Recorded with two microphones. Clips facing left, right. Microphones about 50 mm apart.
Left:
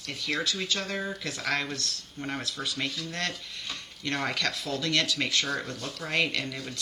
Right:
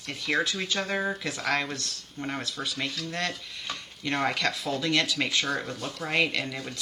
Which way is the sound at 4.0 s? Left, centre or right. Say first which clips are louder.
Right 3 dB; centre.